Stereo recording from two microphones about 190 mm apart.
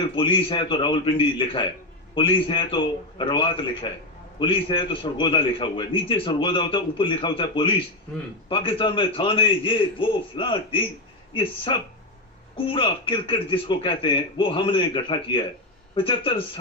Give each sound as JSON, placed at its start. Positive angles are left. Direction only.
{"t": 0.0, "sound": "a man's voice", "side_deg": 30}